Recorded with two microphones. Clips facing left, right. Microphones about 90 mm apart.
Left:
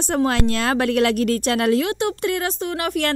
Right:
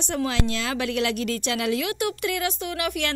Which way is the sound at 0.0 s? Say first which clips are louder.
Left 6 dB; 45° left (ahead or behind).